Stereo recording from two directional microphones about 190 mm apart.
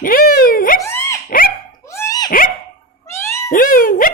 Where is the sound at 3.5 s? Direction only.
45° left (ahead or behind).